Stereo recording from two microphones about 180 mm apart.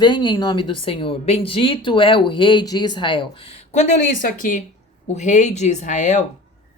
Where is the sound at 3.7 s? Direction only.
45° left (ahead or behind).